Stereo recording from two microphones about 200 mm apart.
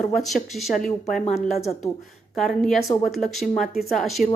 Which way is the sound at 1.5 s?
30° left (ahead or behind).